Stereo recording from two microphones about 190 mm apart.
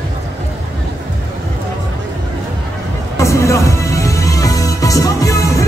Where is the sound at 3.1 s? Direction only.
15° left (ahead or behind).